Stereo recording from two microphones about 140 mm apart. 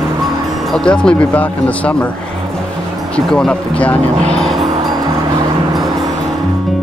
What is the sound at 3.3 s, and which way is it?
Speech, 5° left (ahead or behind).